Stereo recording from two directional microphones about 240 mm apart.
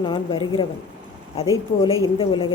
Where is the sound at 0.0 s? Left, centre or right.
Centre.